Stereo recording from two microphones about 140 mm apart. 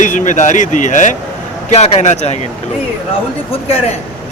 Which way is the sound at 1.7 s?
50° left (ahead or behind).